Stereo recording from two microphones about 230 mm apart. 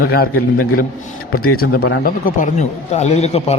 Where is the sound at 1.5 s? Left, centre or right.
Left.